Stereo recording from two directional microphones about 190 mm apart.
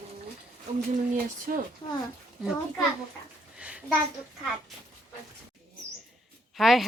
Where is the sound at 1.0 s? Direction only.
40° right (ahead or behind).